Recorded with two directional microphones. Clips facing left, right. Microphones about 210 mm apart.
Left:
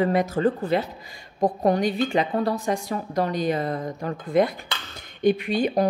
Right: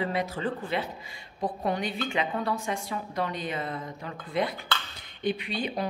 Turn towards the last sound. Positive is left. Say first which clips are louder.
# left 9 dB
turn(degrees=45)  # may be behind; listen again after turning